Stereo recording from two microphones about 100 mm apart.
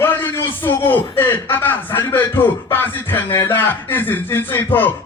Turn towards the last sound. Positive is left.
turn(degrees=20)  # may be behind; listen again after turning